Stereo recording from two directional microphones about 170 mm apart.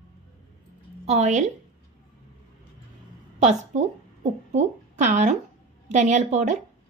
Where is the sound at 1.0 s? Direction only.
40° right (ahead or behind).